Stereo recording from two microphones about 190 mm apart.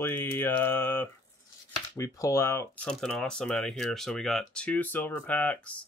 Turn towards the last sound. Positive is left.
turn(degrees=5)  # may be behind; listen again after turning